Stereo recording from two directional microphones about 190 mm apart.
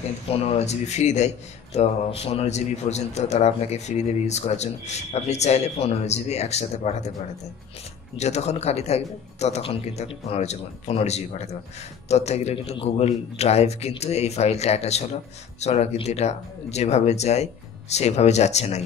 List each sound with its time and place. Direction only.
0.3 s a man's voice: 30° left (ahead or behind)
8.2 s a man's voice: 35° left (ahead or behind)